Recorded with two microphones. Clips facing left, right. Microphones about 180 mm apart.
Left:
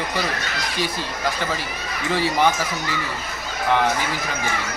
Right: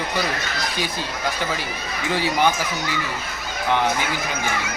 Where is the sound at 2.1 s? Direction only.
Centre (ahead or behind).